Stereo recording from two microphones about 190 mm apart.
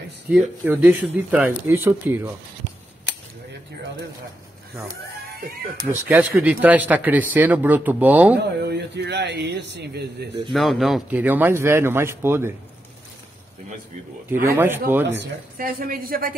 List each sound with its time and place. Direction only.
0.3 s speech: 10° right (ahead or behind)
5.9 s speech: 10° right (ahead or behind)
8.4 s a man's voice: 60° right (ahead or behind)
10.5 s speech: centre (ahead or behind)
14.3 s speech: 10° right (ahead or behind)
15.5 s speech: 50° right (ahead or behind)